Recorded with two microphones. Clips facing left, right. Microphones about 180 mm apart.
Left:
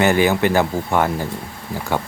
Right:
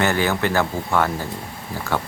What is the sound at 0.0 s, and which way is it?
Speech, 15° left (ahead or behind).